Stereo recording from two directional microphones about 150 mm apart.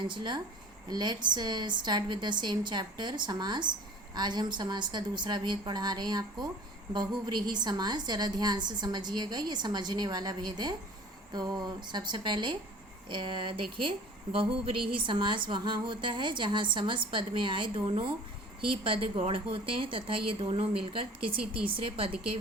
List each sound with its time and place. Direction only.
0.0 s a woman's voice: 30° right (ahead or behind)
15.0 s a woman's voice: 35° right (ahead or behind)
21.2 s speech: 75° right (ahead or behind)
21.7 s a woman's voice: 35° right (ahead or behind)